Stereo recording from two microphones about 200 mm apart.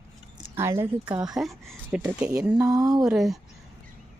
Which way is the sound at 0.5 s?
10° right (ahead or behind).